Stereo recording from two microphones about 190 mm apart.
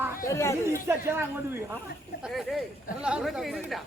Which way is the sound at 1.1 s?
10° right (ahead or behind).